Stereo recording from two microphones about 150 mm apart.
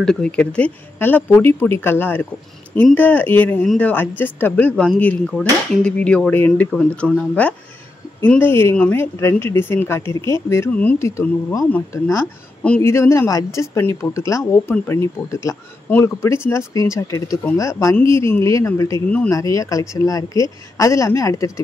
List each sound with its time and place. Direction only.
0.0 s speech: 5° left (ahead or behind); by 19.0 s 20° left (ahead or behind)
19.0 s speech: 10° left (ahead or behind)
19.3 s speech: 20° left (ahead or behind)